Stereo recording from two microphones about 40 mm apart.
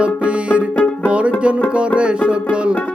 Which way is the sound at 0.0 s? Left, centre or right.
Right.